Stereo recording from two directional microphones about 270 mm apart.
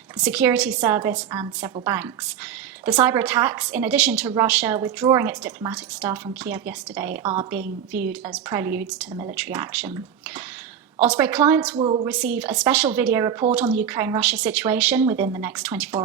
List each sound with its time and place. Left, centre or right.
0.2 s a woman's voice: centre
11.0 s a woman's voice: centre
11.8 s a woman's voice: right
12.0 s a woman's voice: centre